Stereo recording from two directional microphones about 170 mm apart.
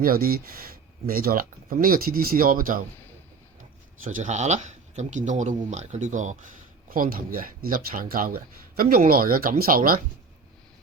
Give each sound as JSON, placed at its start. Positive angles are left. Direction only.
{"t": 0.0, "sound": "speech", "side_deg": -60}
{"t": 4.0, "sound": "speech", "side_deg": -45}